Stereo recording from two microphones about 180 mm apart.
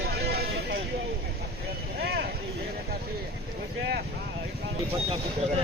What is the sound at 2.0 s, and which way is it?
Vehicle, 60° right (ahead or behind).